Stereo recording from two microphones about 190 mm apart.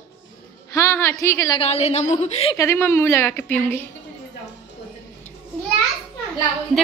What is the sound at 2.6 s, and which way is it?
A woman's voice, 15° left (ahead or behind).